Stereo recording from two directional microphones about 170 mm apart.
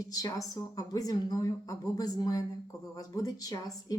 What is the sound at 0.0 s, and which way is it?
A woman's voice, 20° left (ahead or behind).